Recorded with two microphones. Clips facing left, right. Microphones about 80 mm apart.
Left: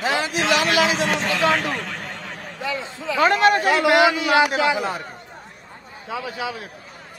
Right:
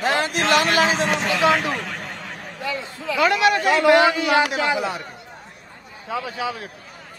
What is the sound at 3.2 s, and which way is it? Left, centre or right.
Speech, left.